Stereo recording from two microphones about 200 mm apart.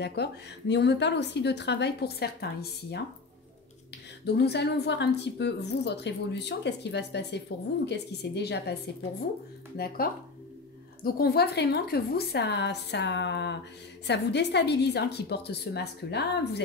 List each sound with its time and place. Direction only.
0.0 s a woman's voice: 55° left (ahead or behind)
4.4 s a woman's voice: 55° left (ahead or behind)
9.8 s a woman's voice: 50° left (ahead or behind)